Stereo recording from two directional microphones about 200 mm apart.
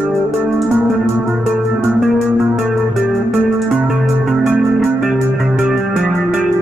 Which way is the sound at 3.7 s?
5° right (ahead or behind).